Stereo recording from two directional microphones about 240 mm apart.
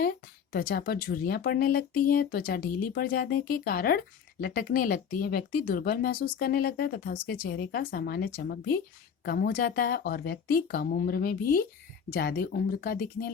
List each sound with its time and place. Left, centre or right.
0.5 s speech: left